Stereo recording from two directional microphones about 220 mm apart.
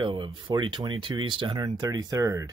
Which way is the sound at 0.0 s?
20° right (ahead or behind).